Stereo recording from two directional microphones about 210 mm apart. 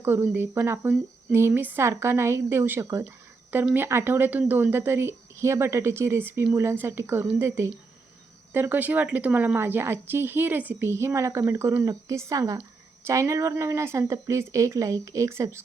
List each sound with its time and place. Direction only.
0.0 s speech: 10° right (ahead or behind)